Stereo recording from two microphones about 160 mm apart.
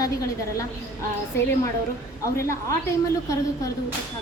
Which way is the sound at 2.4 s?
15° left (ahead or behind).